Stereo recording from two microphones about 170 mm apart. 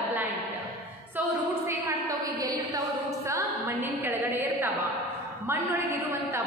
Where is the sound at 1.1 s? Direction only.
15° right (ahead or behind).